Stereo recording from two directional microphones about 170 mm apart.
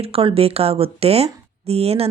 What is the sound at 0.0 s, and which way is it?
Speech, 35° right (ahead or behind).